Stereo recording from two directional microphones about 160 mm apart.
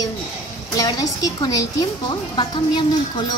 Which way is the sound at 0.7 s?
20° left (ahead or behind).